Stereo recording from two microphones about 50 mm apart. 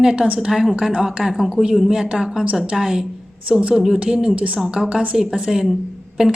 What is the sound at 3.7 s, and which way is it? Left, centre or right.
A woman's voice, centre.